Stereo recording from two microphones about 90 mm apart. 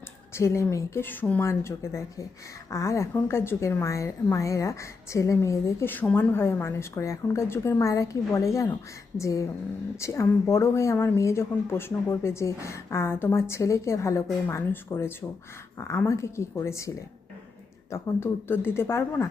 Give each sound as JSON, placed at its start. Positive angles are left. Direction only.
{"t": 0.3, "sound": "a woman's voice", "side_deg": 30}
{"t": 1.0, "sound": "a woman's voice", "side_deg": 20}
{"t": 5.9, "sound": "a woman's voice", "side_deg": 20}
{"t": 17.9, "sound": "speech", "side_deg": 25}